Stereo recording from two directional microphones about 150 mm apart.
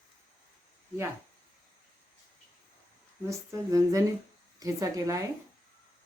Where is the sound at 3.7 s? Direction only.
20° right (ahead or behind).